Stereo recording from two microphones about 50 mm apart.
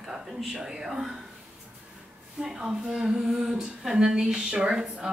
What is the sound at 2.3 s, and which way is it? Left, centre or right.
Speech, centre.